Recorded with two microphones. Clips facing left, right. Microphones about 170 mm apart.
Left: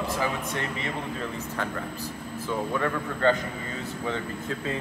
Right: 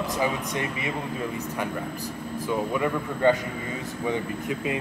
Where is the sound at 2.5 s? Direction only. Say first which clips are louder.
Right 2 dB; 15° right (ahead or behind).